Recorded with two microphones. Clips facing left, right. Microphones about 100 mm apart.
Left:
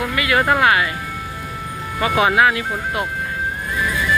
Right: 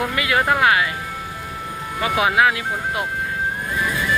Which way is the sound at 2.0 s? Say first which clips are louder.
Left 2 dB; 5° right (ahead or behind).